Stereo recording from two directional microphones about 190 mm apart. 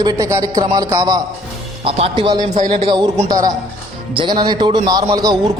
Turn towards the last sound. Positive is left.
turn(degrees=-20)  # may be behind; listen again after turning